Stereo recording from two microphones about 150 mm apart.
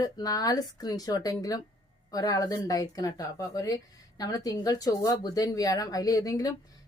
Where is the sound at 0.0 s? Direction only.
25° left (ahead or behind).